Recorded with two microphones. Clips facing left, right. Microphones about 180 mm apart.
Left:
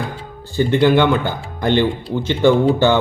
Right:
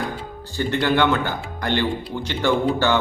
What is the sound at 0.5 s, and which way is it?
Speech, 15° left (ahead or behind).